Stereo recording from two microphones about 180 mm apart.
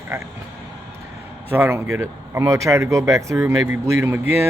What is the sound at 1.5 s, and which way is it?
Speech, 10° right (ahead or behind).